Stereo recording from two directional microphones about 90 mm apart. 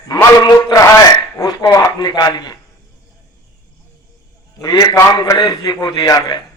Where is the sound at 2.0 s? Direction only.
50° left (ahead or behind).